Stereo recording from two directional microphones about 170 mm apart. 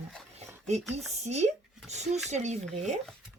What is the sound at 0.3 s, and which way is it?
Speech, 40° right (ahead or behind).